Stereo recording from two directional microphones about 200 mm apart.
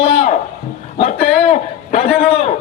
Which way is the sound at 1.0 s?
45° left (ahead or behind).